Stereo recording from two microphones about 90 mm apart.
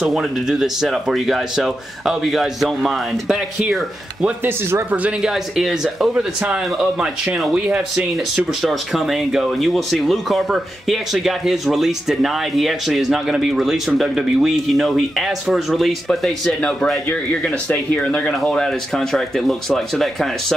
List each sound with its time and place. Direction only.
0.0 s speech: 5° right (ahead or behind)
4.5 s speech: 30° right (ahead or behind)
4.9 s speech: 15° right (ahead or behind)
5.3 s speech: 5° right (ahead or behind)